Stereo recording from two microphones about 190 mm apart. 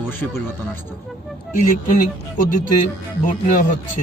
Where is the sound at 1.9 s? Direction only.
45° left (ahead or behind).